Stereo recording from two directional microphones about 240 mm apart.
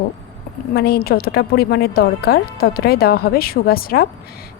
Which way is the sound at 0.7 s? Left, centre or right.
Left.